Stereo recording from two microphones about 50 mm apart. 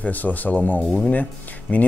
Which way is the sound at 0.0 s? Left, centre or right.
Left.